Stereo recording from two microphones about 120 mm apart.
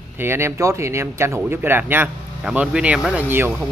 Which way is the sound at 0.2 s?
20° right (ahead or behind).